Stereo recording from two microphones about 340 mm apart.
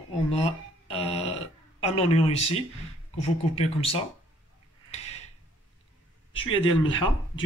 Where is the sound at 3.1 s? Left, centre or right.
Centre.